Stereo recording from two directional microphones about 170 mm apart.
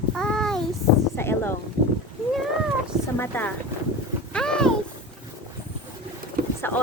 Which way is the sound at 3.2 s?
10° left (ahead or behind).